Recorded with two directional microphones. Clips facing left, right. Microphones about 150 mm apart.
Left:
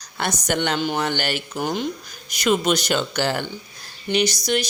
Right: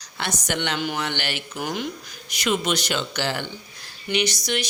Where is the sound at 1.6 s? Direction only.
30° left (ahead or behind).